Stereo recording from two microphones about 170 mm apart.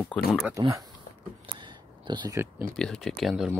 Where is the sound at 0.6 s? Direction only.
20° right (ahead or behind).